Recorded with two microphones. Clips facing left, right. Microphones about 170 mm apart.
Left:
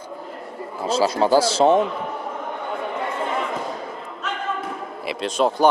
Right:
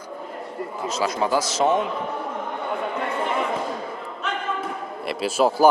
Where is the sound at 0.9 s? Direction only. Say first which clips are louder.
Left 5 dB; 30° left (ahead or behind).